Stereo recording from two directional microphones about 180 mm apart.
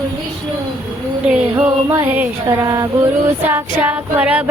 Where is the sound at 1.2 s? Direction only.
5° right (ahead or behind).